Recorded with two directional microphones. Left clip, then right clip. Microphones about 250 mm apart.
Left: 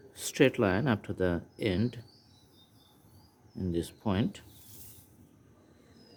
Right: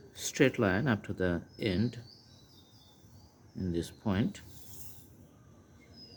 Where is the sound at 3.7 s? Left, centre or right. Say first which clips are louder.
Left 2 dB; centre.